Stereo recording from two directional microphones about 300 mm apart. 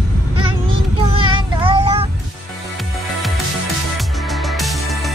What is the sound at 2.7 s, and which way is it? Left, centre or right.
Music, centre.